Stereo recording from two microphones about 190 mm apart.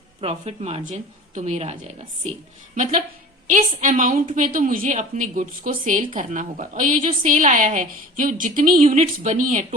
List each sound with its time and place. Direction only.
0.2 s speech: 35° right (ahead or behind)
3.4 s a woman's voice: 45° right (ahead or behind)